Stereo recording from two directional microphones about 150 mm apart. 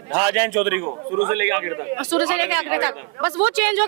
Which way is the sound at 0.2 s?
10° right (ahead or behind).